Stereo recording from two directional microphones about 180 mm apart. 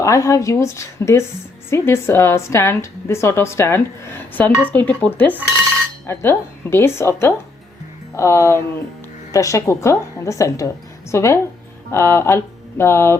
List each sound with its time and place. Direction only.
0.0 s a woman's voice: 15° left (ahead or behind)